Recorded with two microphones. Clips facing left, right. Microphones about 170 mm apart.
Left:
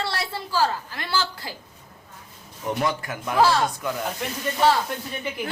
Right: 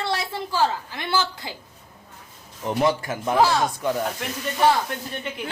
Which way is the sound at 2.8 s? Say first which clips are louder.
Right 4 dB; 25° right (ahead or behind).